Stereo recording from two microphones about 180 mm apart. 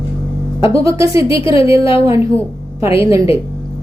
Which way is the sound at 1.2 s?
30° left (ahead or behind).